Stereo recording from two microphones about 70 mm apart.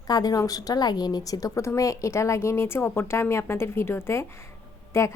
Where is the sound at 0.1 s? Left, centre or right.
Left.